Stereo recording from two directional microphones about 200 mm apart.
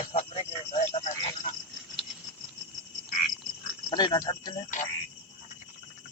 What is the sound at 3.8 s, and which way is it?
Cricket, 20° left (ahead or behind).